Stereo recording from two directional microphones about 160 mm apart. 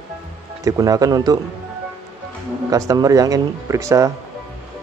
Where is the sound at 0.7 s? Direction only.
20° right (ahead or behind).